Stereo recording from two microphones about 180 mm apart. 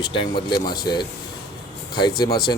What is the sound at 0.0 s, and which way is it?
Speech, 25° left (ahead or behind).